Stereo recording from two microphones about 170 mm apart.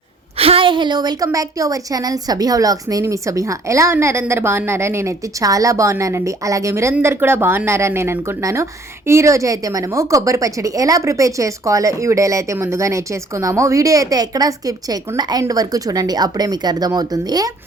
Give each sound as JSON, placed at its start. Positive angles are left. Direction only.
{"t": 0.3, "sound": "a woman's voice", "side_deg": -35}